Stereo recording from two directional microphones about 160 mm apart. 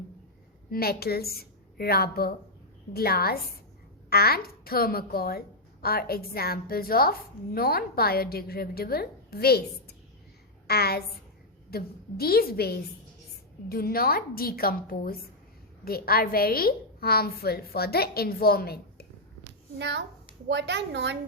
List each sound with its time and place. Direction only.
0.7 s a woman's voice: 75° left (ahead or behind)
19.8 s a woman's voice: 90° right